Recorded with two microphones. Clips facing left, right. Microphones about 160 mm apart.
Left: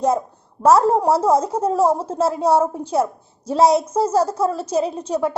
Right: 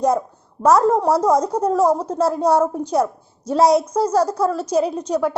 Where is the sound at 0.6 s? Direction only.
30° left (ahead or behind).